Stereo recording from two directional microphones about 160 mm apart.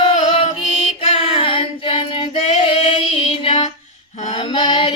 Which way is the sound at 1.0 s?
35° left (ahead or behind).